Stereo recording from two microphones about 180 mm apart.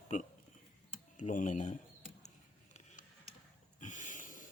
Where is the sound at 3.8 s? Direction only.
45° left (ahead or behind).